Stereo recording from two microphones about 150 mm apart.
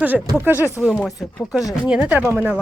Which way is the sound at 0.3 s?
15° right (ahead or behind).